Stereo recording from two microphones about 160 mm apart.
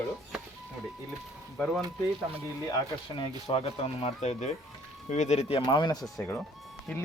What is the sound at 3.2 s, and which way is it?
Speech, 35° left (ahead or behind).